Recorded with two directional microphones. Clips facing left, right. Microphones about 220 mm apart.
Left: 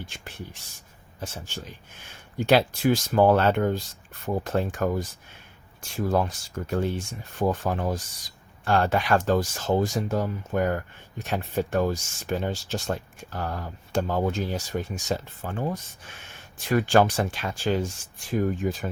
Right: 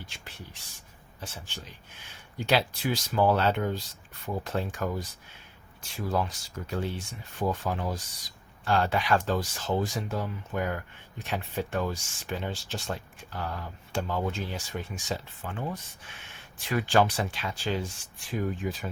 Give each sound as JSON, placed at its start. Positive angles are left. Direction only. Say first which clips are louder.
{"t": 1.2, "sound": "speech", "louder": "left 6 dB", "side_deg": 45}
{"t": 6.1, "sound": "speech", "louder": "left 4 dB", "side_deg": 50}